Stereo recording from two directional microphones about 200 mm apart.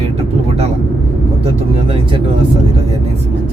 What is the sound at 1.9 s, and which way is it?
Speech, 25° right (ahead or behind).